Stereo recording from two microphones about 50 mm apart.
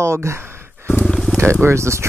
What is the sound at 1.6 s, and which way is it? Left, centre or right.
Speech, right.